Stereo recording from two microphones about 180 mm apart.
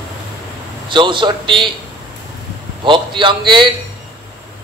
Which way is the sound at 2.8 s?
25° right (ahead or behind).